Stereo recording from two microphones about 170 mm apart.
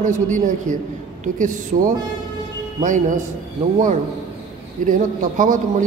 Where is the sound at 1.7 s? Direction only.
40° right (ahead or behind).